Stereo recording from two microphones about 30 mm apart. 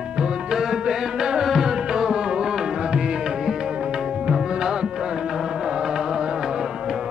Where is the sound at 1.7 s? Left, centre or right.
Right.